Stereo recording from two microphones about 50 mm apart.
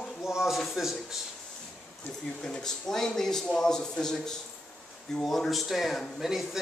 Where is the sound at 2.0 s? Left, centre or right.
Left.